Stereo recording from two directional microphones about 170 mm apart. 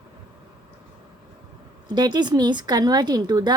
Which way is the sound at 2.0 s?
25° right (ahead or behind).